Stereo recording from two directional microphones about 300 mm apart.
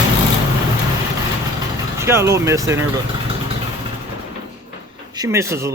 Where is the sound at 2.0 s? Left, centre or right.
Centre.